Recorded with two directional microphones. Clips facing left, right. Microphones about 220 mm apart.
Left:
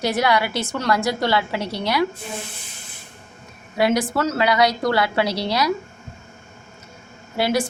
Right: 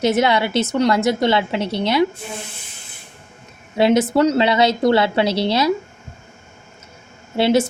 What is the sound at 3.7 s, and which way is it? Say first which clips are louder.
A woman's voice: right 5 dB; 25° right (ahead or behind).